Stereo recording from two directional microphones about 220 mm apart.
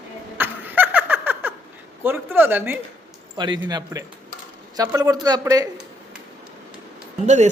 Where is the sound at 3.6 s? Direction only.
15° right (ahead or behind).